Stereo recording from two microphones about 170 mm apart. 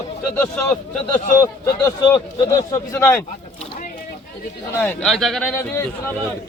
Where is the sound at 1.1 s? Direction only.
20° left (ahead or behind).